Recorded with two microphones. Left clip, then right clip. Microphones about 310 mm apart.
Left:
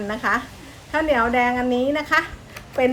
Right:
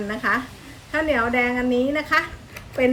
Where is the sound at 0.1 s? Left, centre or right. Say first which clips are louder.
Left 1 dB; centre.